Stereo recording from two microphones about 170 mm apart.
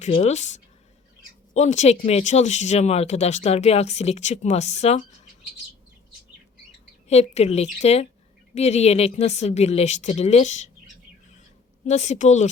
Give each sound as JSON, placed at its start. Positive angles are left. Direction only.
{"t": 0.0, "sound": "speech", "side_deg": 40}
{"t": 7.1, "sound": "speech", "side_deg": 40}
{"t": 11.9, "sound": "speech", "side_deg": 45}